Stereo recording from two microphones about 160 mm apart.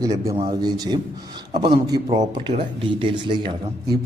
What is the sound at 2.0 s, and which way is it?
A man's voice, 40° right (ahead or behind).